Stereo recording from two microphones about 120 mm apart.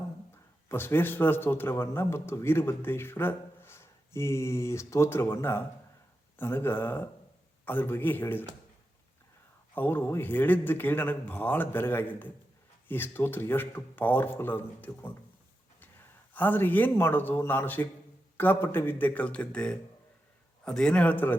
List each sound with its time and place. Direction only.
0.7 s a man's voice: 20° left (ahead or behind)
9.7 s a man's voice: 15° left (ahead or behind)
16.3 s a man's voice: 15° left (ahead or behind)